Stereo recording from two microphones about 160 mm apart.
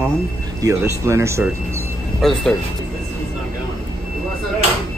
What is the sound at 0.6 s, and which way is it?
Speech, 20° right (ahead or behind).